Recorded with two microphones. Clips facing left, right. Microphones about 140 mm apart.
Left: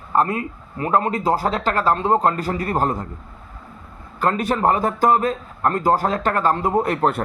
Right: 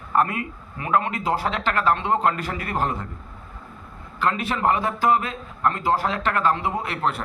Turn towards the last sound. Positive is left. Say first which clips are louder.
# left 7 dB
turn(degrees=45)  # may be behind; listen again after turning